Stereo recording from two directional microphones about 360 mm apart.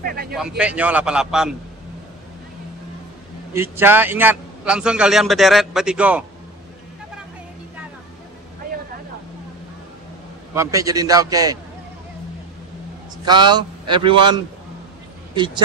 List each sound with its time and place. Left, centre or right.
0.0 s speech: right
0.3 s a man's voice: centre
3.5 s a man's voice: centre
10.5 s a man's voice: centre
13.2 s a man's voice: centre